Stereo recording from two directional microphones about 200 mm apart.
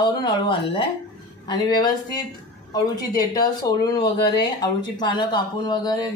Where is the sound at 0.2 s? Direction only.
25° left (ahead or behind).